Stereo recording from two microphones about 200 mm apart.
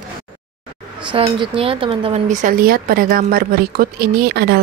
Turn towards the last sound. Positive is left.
turn(degrees=-50)  # may be behind; listen again after turning